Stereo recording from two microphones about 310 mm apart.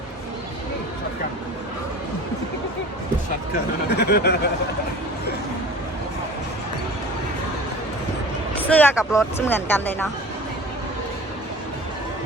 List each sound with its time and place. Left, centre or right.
3.8 s speech: left
8.7 s speech: centre